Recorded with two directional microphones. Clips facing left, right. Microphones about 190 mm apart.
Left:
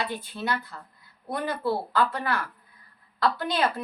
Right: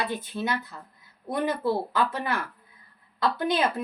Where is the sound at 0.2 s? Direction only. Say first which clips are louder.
Right 1 dB; 20° right (ahead or behind).